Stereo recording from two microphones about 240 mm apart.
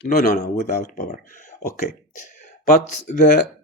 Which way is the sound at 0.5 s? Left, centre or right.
Left.